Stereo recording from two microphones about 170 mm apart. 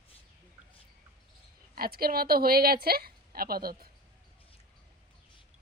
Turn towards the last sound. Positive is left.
turn(degrees=-60)  # may be behind; listen again after turning